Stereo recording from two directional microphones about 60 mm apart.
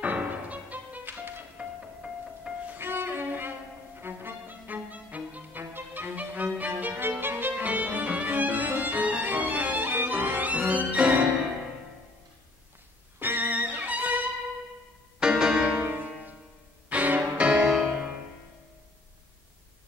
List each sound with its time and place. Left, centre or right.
0.0 s music: right
1.6 s music: centre
2.8 s music: right
5.6 s violin: right
13.2 s music: right
15.1 s music: centre